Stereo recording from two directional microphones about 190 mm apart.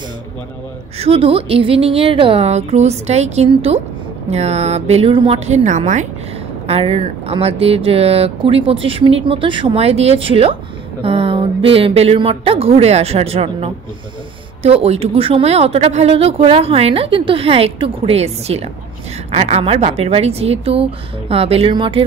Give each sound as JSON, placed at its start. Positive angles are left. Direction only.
{"t": 0.9, "sound": "speech", "side_deg": -30}